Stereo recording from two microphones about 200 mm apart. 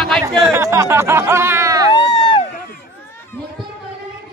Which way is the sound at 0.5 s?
15° right (ahead or behind).